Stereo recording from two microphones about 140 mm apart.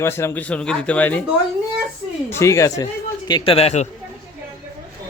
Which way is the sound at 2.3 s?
20° left (ahead or behind).